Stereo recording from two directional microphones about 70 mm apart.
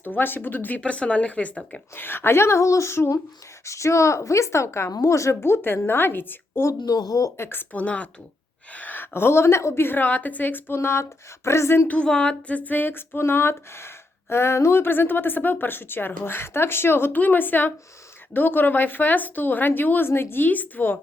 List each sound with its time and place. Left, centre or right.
0.0 s a woman's voice: left
2.0 s a woman's voice: left
6.7 s speech: left
7.3 s a woman's voice: left
10.8 s speech: left
11.9 s a woman's voice: centre